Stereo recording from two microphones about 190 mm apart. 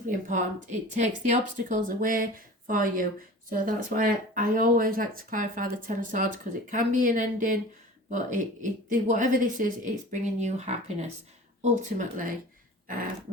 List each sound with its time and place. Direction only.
0.3 s a woman's voice: 40° right (ahead or behind)